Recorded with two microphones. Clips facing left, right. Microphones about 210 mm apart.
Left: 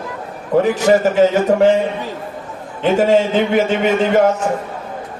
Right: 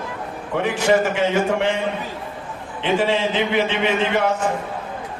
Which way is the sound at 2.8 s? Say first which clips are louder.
Left 6 dB; 45° left (ahead or behind).